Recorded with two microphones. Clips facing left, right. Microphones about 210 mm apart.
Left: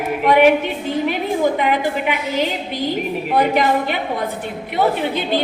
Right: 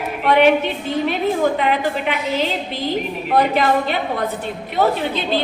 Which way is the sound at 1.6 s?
15° left (ahead or behind).